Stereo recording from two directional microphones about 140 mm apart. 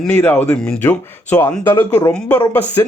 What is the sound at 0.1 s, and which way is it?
Speech, 10° left (ahead or behind).